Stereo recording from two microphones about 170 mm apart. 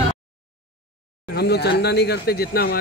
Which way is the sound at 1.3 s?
75° left (ahead or behind).